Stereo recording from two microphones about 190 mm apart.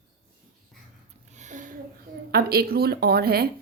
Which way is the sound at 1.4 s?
40° right (ahead or behind).